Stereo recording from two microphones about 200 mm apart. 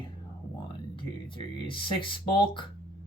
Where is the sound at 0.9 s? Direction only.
25° left (ahead or behind).